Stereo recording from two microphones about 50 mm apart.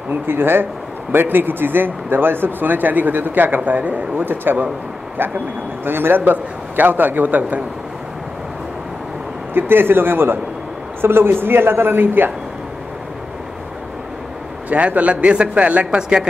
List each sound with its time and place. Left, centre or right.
0.1 s a woman's voice: right
5.9 s speech: right
9.5 s a woman's voice: right
14.7 s a man's voice: right